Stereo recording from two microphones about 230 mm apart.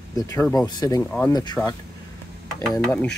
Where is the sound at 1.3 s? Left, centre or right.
Centre.